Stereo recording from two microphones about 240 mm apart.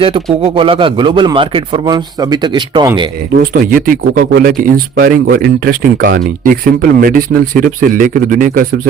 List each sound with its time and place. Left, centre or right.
0.0 s speech: right
3.3 s speech: right